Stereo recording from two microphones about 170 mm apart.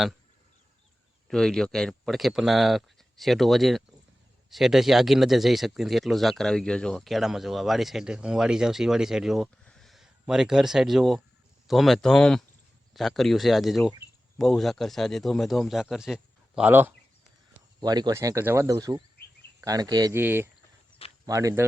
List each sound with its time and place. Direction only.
1.3 s speech: 5° left (ahead or behind)
17.7 s speech: 25° right (ahead or behind)
20.1 s speech: 10° right (ahead or behind)